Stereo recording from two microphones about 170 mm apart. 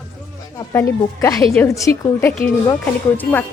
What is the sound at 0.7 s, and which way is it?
A woman's voice, 15° left (ahead or behind).